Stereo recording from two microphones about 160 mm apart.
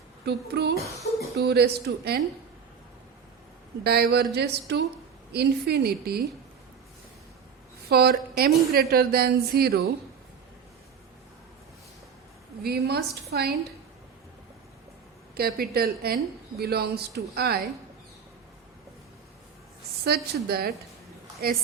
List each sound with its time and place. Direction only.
0.3 s speech: 90° right
3.8 s speech: 85° right
7.9 s a woman's voice: 75° right (ahead or behind)
12.6 s speech: 80° right
15.4 s a woman's voice: 70° right (ahead or behind)
16.6 s speech: 85° right
20.1 s a woman's voice: 75° right (ahead or behind)